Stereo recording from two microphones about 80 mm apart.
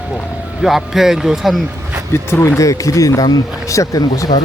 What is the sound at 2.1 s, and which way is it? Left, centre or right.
Speech, left.